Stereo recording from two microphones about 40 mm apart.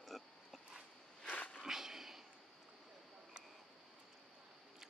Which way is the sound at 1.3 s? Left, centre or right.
Left.